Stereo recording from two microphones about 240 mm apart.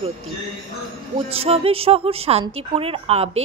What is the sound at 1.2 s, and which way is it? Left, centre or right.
Speech, right.